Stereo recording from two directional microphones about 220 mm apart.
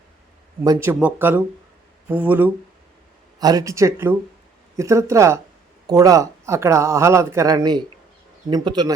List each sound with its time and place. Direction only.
0.6 s a man's voice: 15° right (ahead or behind)